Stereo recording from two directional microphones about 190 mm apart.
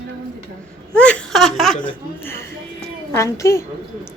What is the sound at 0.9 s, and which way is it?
Speech, 5° left (ahead or behind).